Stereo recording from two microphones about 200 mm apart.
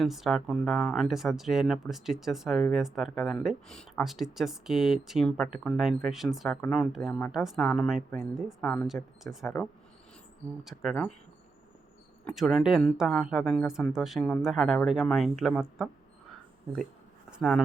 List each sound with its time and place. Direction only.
0.0 s speech: centre (ahead or behind)
10.6 s speech: centre (ahead or behind)
12.2 s speech: centre (ahead or behind)
17.3 s speech: centre (ahead or behind)